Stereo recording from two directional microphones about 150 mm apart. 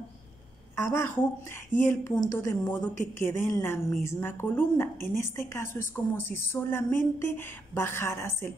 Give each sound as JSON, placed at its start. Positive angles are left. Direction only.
{"t": 0.8, "sound": "a woman's voice", "side_deg": 15}